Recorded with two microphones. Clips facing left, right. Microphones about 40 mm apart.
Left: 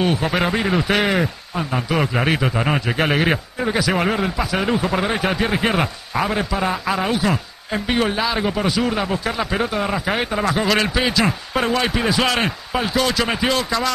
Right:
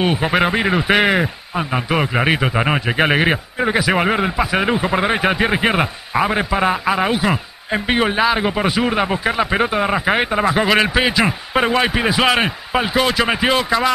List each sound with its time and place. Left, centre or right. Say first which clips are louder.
0.0 s a man's voice: right 3 dB; right